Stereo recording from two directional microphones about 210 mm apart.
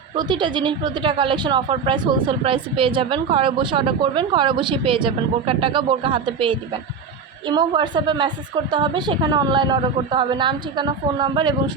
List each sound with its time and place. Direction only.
0.2 s a woman's voice: 20° right (ahead or behind)